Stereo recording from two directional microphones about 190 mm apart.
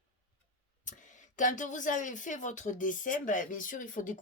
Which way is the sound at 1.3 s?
40° left (ahead or behind).